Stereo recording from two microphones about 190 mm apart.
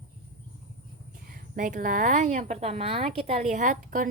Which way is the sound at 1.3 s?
45° right (ahead or behind).